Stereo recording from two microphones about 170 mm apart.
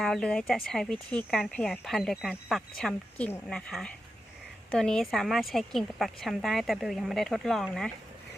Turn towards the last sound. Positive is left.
turn(degrees=0)  # may be behind; listen again after turning